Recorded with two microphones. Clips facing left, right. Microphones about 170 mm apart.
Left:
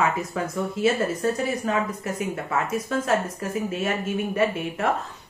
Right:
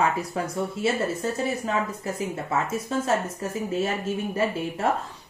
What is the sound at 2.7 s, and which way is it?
A woman's voice, 30° right (ahead or behind).